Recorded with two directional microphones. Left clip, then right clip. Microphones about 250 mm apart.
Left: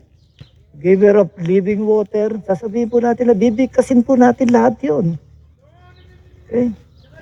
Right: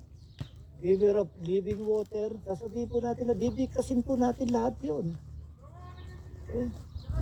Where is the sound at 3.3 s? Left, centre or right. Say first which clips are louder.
Left 16 dB; left.